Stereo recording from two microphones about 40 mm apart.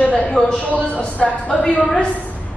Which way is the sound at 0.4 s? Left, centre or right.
Left.